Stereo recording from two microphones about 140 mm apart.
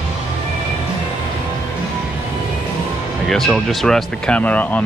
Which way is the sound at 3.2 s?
Centre (ahead or behind).